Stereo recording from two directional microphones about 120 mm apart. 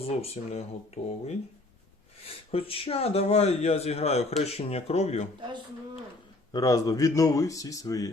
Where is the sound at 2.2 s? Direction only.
50° left (ahead or behind).